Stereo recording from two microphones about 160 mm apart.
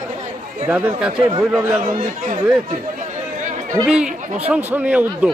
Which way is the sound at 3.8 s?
5° right (ahead or behind).